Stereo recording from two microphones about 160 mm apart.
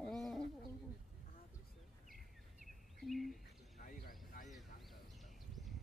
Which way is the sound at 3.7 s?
55° left (ahead or behind).